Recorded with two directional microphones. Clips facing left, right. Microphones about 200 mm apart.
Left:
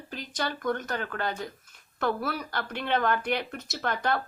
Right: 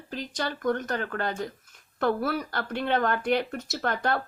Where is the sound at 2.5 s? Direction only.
40° right (ahead or behind).